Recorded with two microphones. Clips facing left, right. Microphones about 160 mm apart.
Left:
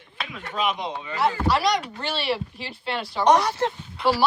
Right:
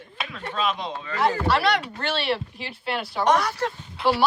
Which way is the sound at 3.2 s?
20° left (ahead or behind).